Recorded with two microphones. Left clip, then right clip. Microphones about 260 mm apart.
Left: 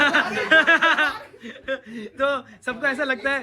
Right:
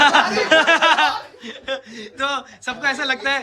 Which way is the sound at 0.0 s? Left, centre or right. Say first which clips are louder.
Right 5 dB; centre.